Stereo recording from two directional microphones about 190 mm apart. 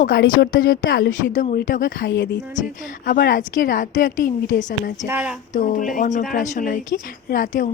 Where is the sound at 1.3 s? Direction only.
40° left (ahead or behind).